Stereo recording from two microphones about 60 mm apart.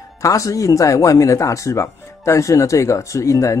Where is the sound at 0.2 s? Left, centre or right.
Left.